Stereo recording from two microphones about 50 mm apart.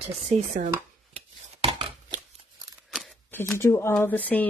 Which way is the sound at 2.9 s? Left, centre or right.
Centre.